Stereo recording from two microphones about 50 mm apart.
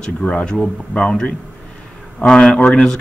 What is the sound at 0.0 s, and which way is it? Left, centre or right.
Speech, left.